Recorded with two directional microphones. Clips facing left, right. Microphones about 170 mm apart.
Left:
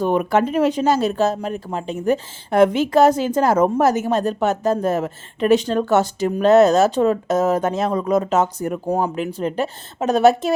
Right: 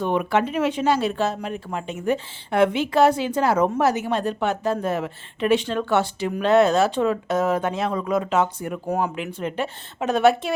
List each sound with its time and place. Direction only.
0.0 s speech: 40° left (ahead or behind)